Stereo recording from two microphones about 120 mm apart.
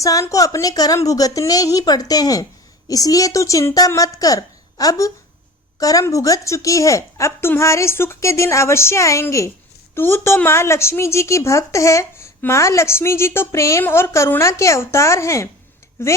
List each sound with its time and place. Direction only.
0.0 s a woman's voice: 30° left (ahead or behind)